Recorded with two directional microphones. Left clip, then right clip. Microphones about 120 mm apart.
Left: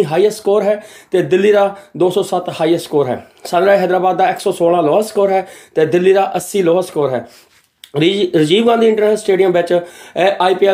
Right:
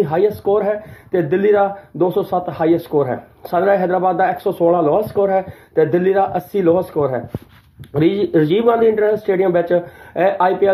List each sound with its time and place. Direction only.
0.0 s speech: 35° left (ahead or behind)